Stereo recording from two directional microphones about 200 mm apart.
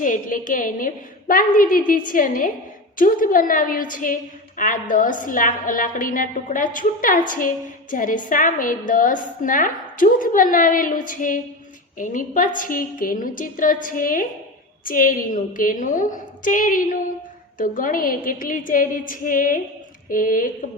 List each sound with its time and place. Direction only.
0.0 s a woman's voice: 40° left (ahead or behind)